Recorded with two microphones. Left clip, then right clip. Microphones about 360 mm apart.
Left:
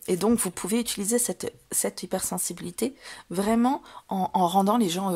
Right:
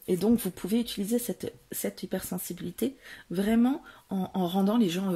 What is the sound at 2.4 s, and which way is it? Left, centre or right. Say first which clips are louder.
Speech: left 3 dB; centre.